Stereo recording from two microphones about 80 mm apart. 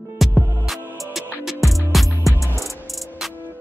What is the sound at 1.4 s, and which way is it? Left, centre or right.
Music, centre.